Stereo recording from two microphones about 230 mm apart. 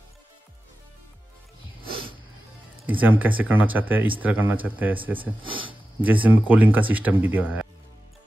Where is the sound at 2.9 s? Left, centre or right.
Centre.